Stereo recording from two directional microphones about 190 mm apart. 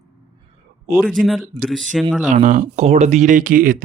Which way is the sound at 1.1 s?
Centre (ahead or behind).